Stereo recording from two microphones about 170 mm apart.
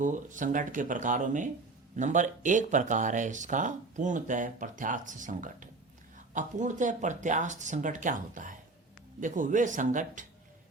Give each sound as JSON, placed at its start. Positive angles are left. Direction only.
{"t": 0.0, "sound": "speech", "side_deg": -50}